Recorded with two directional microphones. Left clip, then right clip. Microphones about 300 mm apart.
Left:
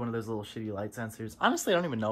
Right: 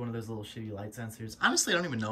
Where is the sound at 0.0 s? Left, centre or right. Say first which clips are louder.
Left 5 dB; centre.